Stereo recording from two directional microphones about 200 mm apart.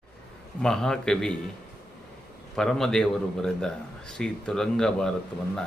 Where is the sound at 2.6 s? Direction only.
Centre (ahead or behind).